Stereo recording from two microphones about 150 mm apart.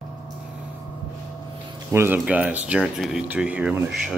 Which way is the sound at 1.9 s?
15° right (ahead or behind).